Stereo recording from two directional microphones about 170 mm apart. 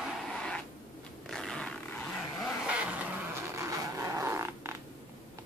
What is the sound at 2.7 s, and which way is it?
Vehicle, 10° right (ahead or behind).